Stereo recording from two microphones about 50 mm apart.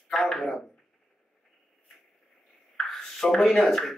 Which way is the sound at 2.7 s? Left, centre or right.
Centre.